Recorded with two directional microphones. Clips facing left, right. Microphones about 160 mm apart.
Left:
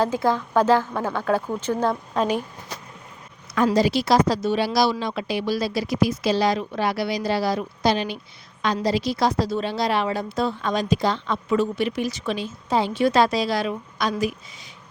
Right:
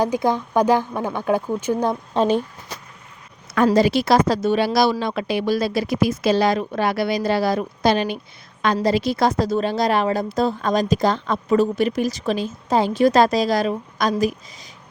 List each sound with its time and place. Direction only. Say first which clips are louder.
0.0 s a woman's voice: right 2 dB; 15° right (ahead or behind)
3.7 s a woman's voice: right 3 dB; 55° right (ahead or behind)